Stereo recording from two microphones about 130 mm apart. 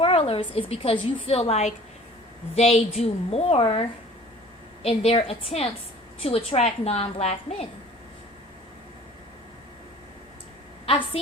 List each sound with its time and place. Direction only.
0.0 s a woman's voice: 45° left (ahead or behind)
10.8 s a woman's voice: 45° left (ahead or behind)